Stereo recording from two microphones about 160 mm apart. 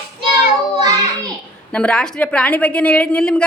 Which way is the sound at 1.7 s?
5° left (ahead or behind).